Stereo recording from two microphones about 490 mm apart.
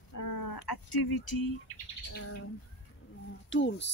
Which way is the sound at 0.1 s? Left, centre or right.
Left.